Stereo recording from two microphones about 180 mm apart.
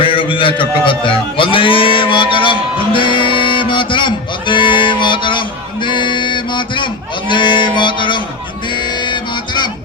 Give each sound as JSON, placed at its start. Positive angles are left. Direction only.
{"t": 0.0, "sound": "a man's voice", "side_deg": 30}
{"t": 8.7, "sound": "music", "side_deg": 25}